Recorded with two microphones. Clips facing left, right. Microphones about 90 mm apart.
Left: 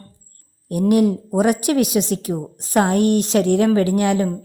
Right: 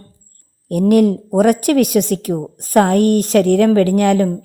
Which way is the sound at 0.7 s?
55° right (ahead or behind).